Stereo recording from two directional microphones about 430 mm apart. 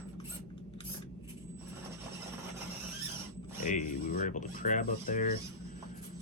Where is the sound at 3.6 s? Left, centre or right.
Centre.